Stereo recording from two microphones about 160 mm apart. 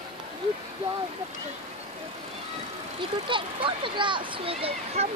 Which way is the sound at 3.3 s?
30° right (ahead or behind).